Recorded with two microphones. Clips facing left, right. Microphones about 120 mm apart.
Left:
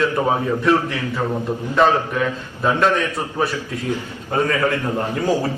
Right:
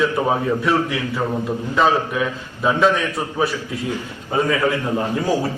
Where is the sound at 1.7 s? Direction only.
Centre (ahead or behind).